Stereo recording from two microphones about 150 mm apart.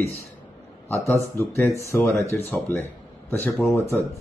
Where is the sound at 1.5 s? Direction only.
15° left (ahead or behind).